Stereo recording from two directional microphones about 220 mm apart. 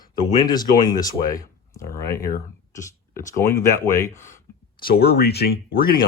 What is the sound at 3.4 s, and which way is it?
Speech, 15° left (ahead or behind).